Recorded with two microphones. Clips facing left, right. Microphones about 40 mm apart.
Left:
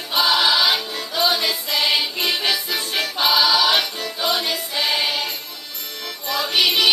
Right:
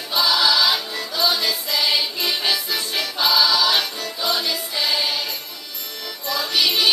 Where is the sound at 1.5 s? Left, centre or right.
Left.